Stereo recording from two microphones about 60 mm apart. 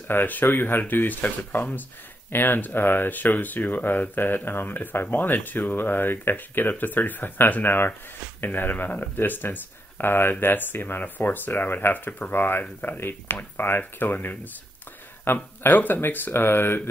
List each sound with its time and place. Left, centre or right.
0.1 s speech: left